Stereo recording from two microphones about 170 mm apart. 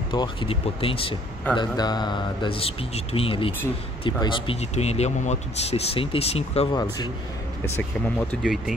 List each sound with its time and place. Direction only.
0.1 s speech: 30° left (ahead or behind)
6.7 s speech: 25° left (ahead or behind)
8.3 s speech: centre (ahead or behind)